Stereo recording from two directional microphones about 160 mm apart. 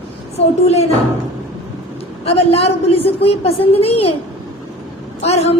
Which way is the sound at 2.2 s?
40° left (ahead or behind).